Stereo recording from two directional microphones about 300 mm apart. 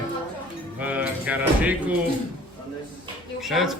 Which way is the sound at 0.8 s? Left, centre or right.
Centre.